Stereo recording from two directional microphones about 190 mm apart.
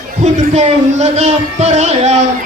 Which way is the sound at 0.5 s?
35° right (ahead or behind).